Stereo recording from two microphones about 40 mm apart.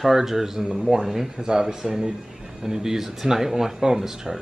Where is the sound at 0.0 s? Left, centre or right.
Centre.